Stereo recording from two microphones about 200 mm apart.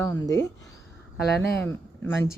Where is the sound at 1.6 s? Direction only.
10° left (ahead or behind).